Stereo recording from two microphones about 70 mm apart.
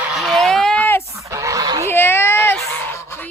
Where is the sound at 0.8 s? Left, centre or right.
Left.